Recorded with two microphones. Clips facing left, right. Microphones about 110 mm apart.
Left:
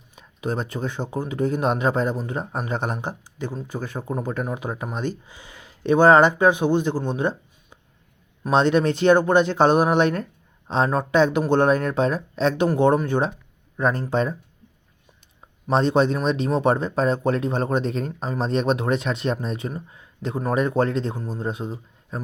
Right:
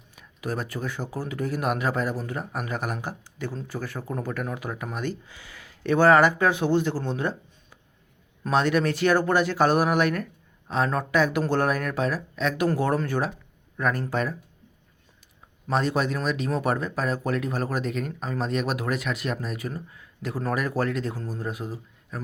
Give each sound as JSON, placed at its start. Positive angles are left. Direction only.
{"t": 0.2, "sound": "speech", "side_deg": 25}
{"t": 15.7, "sound": "speech", "side_deg": 30}